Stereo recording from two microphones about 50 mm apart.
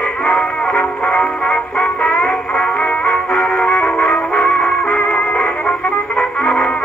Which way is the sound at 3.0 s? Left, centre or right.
Left.